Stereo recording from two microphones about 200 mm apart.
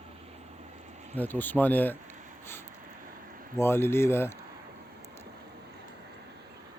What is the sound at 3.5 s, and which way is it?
Speech, 10° left (ahead or behind).